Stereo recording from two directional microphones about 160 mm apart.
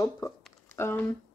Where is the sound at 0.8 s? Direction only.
15° left (ahead or behind).